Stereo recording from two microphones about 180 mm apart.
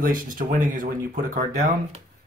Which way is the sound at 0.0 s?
50° right (ahead or behind).